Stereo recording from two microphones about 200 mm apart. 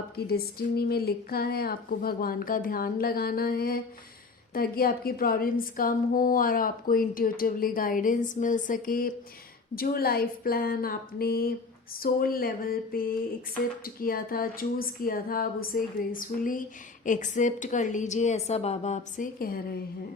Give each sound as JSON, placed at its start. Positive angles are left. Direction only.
{"t": 0.2, "sound": "a woman's voice", "side_deg": 50}